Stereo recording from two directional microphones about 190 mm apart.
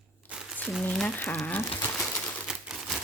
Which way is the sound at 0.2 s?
10° left (ahead or behind).